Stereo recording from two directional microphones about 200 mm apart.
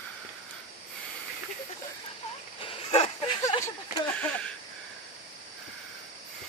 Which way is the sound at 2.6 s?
30° left (ahead or behind).